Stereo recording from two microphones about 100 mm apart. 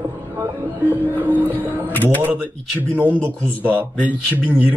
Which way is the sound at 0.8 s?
15° right (ahead or behind).